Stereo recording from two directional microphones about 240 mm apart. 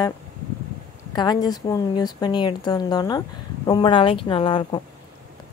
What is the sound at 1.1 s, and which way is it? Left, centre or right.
Speech, centre.